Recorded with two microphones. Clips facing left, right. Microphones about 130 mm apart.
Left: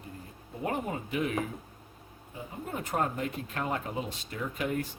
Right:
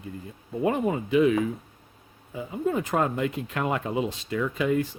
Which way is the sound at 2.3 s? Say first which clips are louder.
Right 11 dB; 90° right.